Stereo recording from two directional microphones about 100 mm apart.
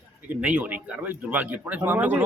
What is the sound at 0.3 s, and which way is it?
A man's voice, 15° right (ahead or behind).